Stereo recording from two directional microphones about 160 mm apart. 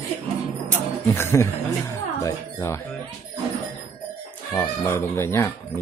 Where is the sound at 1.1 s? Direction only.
15° left (ahead or behind).